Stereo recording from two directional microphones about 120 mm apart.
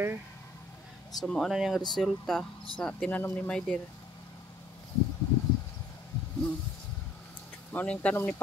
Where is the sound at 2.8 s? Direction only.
15° left (ahead or behind).